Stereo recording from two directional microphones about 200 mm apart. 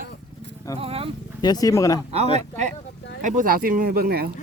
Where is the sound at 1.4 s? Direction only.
20° left (ahead or behind).